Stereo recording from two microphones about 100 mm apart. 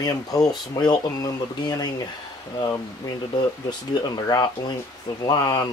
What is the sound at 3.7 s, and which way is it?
Speech, 40° left (ahead or behind).